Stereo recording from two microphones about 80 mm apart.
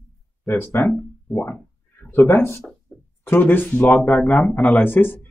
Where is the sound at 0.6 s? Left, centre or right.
Left.